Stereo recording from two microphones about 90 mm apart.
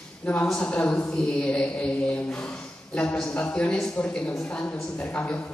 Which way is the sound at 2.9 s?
15° left (ahead or behind).